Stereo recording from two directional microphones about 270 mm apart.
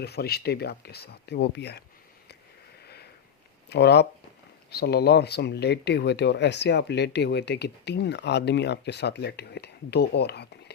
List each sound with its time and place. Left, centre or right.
0.0 s speech: left
2.8 s sniff: left
3.7 s speech: left